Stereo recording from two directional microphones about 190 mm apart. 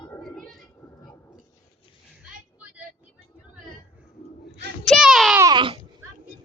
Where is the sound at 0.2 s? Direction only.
Centre (ahead or behind).